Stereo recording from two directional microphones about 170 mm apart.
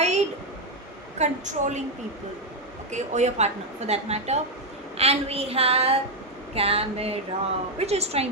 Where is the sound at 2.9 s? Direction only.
45° right (ahead or behind).